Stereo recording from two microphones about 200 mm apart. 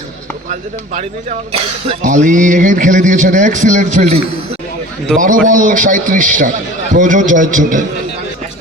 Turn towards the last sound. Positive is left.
turn(degrees=-40)  # may be behind; listen again after turning